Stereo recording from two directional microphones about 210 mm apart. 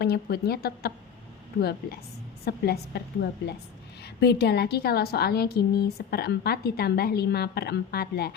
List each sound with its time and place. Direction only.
0.0 s a woman's voice: 50° left (ahead or behind)
2.4 s a woman's voice: 50° left (ahead or behind)